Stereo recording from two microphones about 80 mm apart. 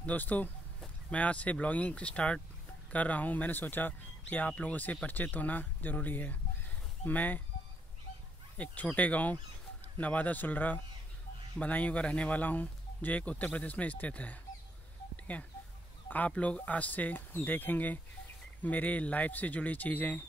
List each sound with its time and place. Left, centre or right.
0.0 s speech: left
8.5 s speech: centre